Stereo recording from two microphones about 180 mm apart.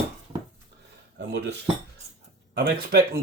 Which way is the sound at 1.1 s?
80° right.